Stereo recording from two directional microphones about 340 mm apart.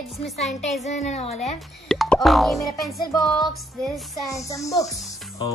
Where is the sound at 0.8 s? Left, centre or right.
Centre.